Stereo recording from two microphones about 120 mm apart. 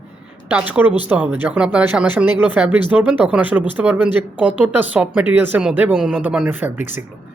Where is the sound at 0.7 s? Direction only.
15° right (ahead or behind).